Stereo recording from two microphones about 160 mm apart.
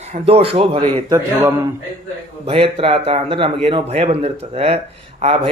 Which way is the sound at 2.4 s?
35° right (ahead or behind).